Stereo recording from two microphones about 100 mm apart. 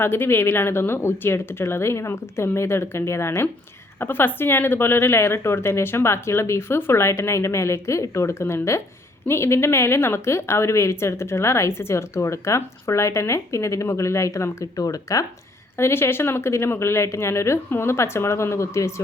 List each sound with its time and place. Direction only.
0.0 s a woman's voice: 20° left (ahead or behind)
15.8 s a woman's voice: 25° left (ahead or behind)